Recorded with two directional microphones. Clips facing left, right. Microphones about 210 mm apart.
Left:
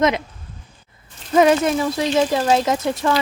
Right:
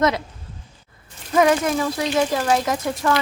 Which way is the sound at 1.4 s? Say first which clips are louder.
Left 2 dB; 25° left (ahead or behind).